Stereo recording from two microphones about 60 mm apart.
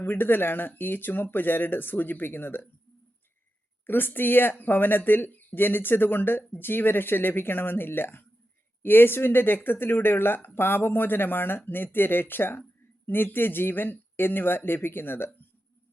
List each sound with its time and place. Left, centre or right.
0.0 s speech: left
3.8 s speech: left